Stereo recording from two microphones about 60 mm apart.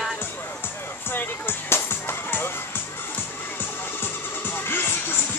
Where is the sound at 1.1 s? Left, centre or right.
Left.